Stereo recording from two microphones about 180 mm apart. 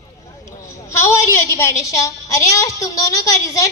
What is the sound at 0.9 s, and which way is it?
A woman's voice, 15° left (ahead or behind).